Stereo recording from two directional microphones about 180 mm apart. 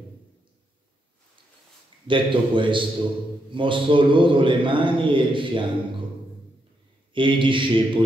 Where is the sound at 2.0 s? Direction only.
25° right (ahead or behind).